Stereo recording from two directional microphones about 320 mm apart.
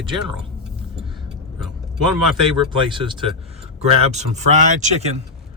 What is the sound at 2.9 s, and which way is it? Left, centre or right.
Speech, centre.